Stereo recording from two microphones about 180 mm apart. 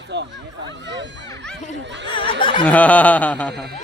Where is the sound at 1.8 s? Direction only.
80° right.